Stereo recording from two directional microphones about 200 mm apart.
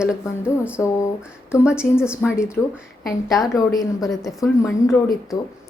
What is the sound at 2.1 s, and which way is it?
Speech, 15° left (ahead or behind).